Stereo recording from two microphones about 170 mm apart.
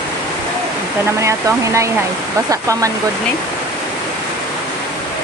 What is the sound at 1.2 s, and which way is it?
Speech, 15° right (ahead or behind).